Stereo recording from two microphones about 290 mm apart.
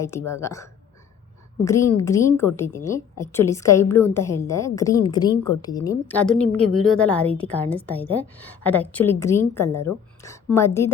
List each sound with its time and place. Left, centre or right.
0.0 s a woman's voice: centre
6.3 s a woman's voice: left
7.0 s a woman's voice: centre